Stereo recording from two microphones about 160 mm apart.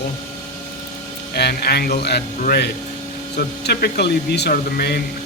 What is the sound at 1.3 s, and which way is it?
Speech, 85° left.